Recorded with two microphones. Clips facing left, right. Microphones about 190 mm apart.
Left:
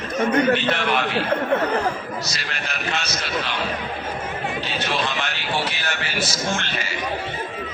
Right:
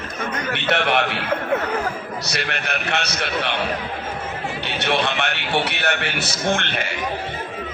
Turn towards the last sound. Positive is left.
turn(degrees=-60)  # may be behind; listen again after turning